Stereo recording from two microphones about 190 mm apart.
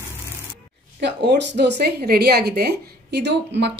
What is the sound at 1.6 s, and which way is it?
A woman's voice, 60° right (ahead or behind).